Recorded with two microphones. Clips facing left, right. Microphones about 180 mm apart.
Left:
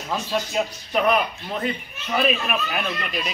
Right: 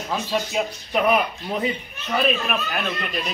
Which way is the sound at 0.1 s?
5° right (ahead or behind).